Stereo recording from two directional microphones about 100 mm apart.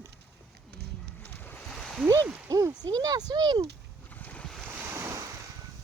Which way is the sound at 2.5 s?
40° right (ahead or behind).